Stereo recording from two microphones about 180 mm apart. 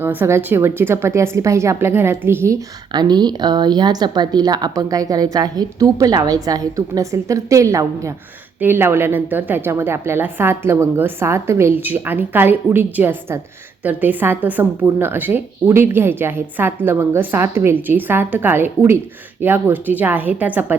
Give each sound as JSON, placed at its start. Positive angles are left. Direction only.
{"t": 0.0, "sound": "a woman's voice", "side_deg": -10}